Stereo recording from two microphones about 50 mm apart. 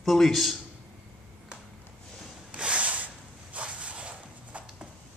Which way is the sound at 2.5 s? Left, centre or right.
Right.